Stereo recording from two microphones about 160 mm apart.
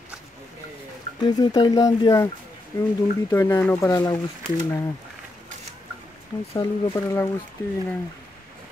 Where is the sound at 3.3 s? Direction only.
15° left (ahead or behind).